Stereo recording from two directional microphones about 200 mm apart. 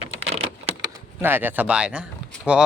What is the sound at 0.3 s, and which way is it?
Typing, 30° right (ahead or behind).